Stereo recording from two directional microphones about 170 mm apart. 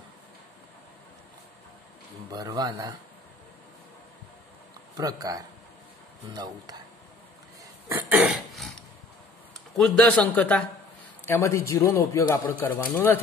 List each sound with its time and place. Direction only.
2.3 s speech: 25° right (ahead or behind)
4.9 s speech: 20° right (ahead or behind)
8.1 s cough: 10° right (ahead or behind)
9.8 s a man's voice: 5° left (ahead or behind)